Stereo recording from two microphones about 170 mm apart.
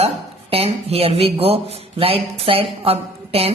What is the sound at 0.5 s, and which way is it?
Speech, 35° right (ahead or behind).